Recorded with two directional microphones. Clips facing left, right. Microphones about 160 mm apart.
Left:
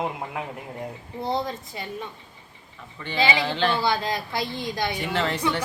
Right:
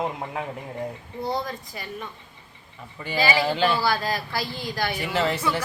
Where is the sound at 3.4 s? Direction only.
5° right (ahead or behind).